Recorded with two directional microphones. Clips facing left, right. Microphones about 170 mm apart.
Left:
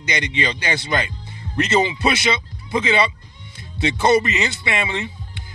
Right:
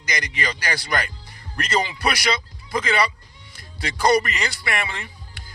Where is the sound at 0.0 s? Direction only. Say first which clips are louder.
Left 4 dB; 25° left (ahead or behind).